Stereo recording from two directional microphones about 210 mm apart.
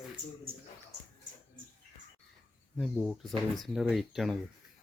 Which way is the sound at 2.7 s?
Centre (ahead or behind).